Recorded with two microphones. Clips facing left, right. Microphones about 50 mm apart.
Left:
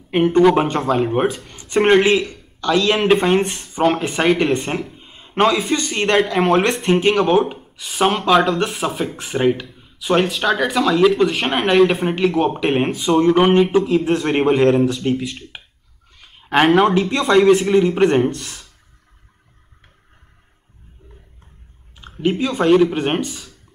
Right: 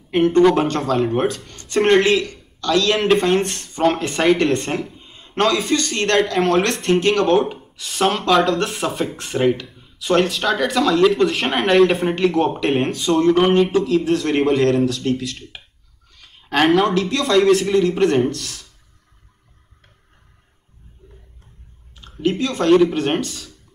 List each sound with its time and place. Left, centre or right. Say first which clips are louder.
0.1 s a man's voice: left 1 dB; centre
15.5 s a sound: left 2 dB; centre
16.9 s a man's voice: left 2 dB; left
22.1 s a man's voice: left 1 dB; centre